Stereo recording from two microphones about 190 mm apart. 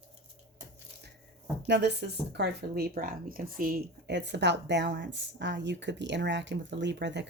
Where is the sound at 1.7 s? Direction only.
60° right (ahead or behind).